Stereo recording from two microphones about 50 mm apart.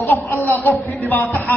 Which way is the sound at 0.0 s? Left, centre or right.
Left.